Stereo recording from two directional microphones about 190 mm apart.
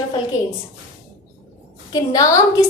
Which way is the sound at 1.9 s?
20° left (ahead or behind).